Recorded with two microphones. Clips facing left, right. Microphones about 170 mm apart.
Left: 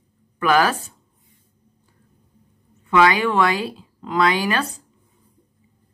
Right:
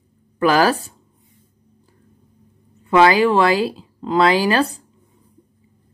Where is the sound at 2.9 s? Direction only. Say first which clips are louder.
Right 4 dB; 30° right (ahead or behind).